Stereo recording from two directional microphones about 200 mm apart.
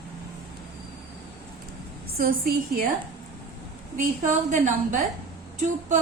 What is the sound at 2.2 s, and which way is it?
Speech, 45° right (ahead or behind).